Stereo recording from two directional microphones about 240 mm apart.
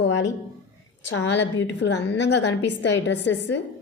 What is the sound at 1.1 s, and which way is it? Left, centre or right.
A woman's voice, left.